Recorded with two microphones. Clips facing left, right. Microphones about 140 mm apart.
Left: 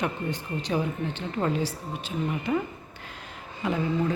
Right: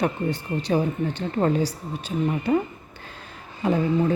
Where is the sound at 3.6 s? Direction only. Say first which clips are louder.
Right 5 dB; 35° right (ahead or behind).